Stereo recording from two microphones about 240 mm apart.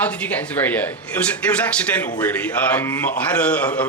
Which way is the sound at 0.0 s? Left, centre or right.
Centre.